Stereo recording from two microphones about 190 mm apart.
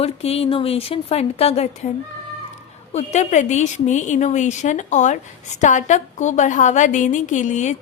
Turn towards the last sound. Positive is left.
turn(degrees=40)  # may be behind; listen again after turning